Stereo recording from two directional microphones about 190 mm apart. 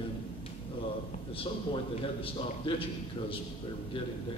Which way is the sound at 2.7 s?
25° left (ahead or behind).